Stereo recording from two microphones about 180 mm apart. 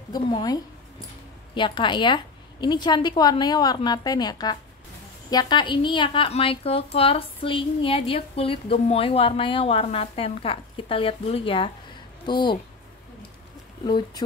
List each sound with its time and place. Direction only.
0.1 s a woman's voice: 20° left (ahead or behind)
13.8 s a woman's voice: 25° left (ahead or behind)